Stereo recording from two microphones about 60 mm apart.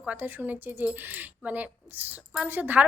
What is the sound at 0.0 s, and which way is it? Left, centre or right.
A woman's voice, right.